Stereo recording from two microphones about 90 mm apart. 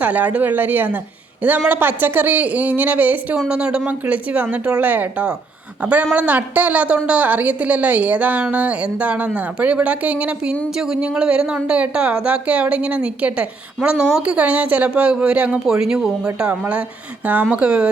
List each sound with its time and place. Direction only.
0.0 s a woman's voice: 15° right (ahead or behind)